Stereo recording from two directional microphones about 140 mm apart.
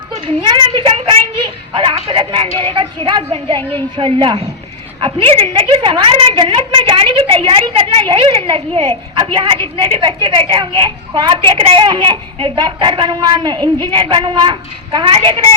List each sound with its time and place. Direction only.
0.4 s a woman's voice: 35° right (ahead or behind)